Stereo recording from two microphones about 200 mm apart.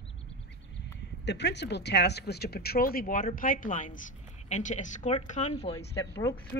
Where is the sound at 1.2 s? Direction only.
60° left (ahead or behind); by 5.7 s 35° left (ahead or behind).